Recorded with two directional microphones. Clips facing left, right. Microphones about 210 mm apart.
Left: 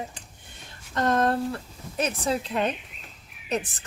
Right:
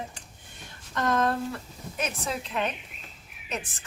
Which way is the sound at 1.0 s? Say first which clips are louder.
Left 3 dB; 35° left (ahead or behind).